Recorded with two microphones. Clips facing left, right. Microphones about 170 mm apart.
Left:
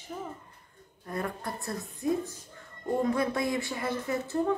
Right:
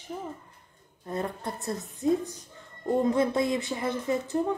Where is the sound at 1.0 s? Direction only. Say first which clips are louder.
Right 2 dB; 25° right (ahead or behind).